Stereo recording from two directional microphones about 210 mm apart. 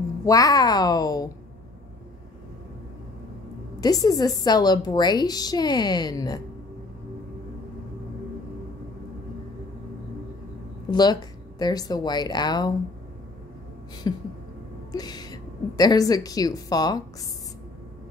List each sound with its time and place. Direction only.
0.2 s speech: 15° left (ahead or behind)
3.8 s a woman's voice: 15° left (ahead or behind)
10.9 s speech: 20° left (ahead or behind)
14.0 s a woman's voice: 20° left (ahead or behind)